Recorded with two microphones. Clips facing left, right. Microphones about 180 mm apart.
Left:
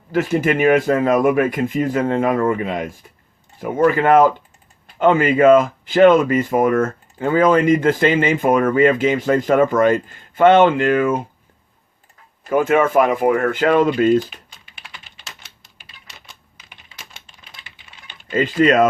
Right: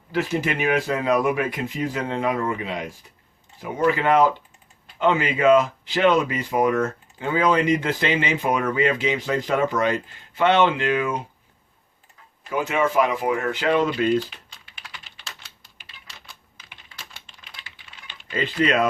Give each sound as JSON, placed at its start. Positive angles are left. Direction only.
{"t": 0.1, "sound": "speech", "side_deg": 50}
{"t": 12.5, "sound": "speech", "side_deg": 50}
{"t": 16.9, "sound": "typing", "side_deg": 20}
{"t": 18.3, "sound": "speech", "side_deg": 45}